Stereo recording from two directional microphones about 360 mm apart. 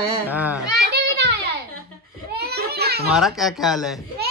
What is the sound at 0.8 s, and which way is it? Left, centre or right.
Children playing, right.